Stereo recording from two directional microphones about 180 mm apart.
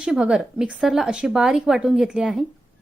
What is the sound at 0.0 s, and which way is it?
A woman's voice, 5° right (ahead or behind).